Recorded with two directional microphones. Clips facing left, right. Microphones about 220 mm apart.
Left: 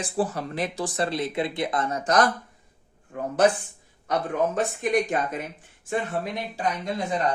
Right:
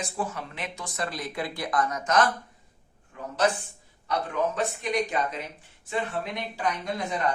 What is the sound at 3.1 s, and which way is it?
Speech, 55° left (ahead or behind).